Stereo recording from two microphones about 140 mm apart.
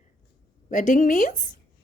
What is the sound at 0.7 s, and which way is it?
Speech, 65° left (ahead or behind).